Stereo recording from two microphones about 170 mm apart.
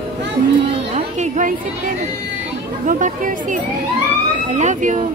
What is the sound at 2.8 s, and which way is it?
Speech, 50° right (ahead or behind).